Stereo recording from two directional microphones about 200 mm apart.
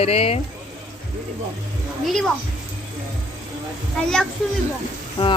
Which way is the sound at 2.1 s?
Centre (ahead or behind).